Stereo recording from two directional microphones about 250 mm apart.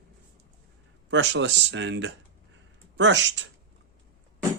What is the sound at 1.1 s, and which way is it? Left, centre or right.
Speech, right.